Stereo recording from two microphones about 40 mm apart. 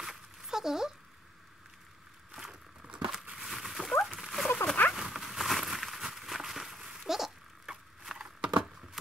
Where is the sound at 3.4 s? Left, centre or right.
Centre.